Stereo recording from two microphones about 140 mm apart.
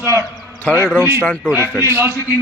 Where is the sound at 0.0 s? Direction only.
20° right (ahead or behind).